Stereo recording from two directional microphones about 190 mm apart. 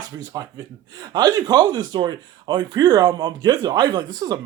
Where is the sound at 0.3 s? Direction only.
20° right (ahead or behind).